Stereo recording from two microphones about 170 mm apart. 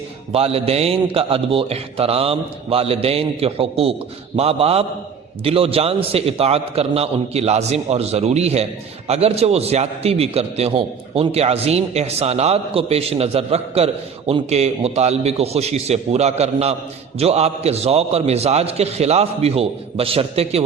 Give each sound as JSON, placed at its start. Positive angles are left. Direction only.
{"t": 0.3, "sound": "a man's voice", "side_deg": -35}